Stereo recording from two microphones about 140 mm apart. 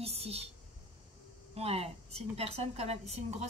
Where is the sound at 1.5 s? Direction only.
45° right (ahead or behind).